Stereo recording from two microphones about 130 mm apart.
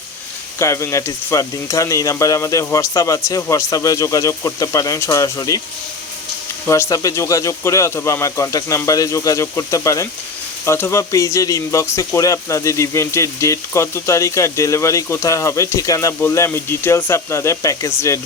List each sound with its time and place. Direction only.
0.6 s speech: 20° left (ahead or behind)
6.7 s speech: 20° left (ahead or behind)